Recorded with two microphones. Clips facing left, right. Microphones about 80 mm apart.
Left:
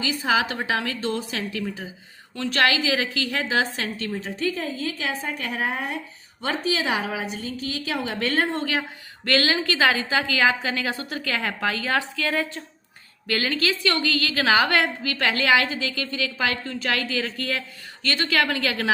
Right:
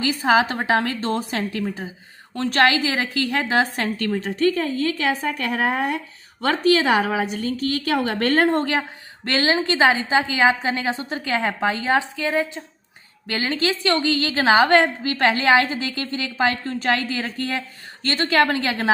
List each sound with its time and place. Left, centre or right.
0.0 s a woman's voice: right
8.3 s a woman's voice: right
9.2 s a woman's voice: right